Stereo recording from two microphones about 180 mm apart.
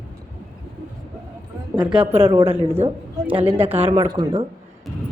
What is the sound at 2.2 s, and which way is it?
Speech, 30° right (ahead or behind).